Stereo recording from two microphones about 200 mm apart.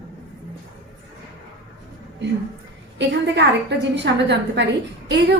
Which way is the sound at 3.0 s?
60° right (ahead or behind).